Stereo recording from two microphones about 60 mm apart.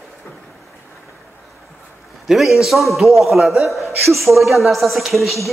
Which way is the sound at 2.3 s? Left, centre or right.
Centre.